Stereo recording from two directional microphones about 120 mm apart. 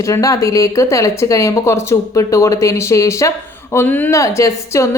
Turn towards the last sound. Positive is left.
turn(degrees=25)  # may be behind; listen again after turning